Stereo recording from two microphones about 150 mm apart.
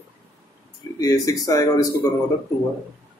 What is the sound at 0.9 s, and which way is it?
Speech, 20° left (ahead or behind).